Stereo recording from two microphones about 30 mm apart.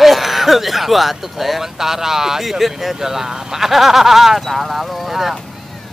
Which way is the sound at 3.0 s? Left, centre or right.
Centre.